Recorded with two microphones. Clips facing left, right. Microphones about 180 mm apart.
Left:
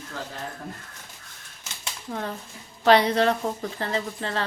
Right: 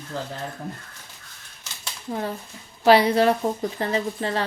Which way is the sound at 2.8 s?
5° right (ahead or behind).